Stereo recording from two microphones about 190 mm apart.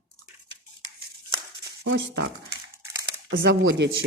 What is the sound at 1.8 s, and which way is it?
Speech, 65° right (ahead or behind).